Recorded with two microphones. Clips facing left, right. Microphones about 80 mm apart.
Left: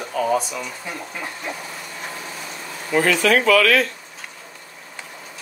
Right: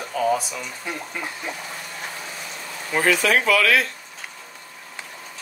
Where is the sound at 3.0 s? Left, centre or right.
Centre.